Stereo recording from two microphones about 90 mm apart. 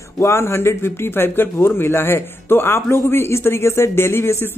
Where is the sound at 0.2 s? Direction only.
30° left (ahead or behind).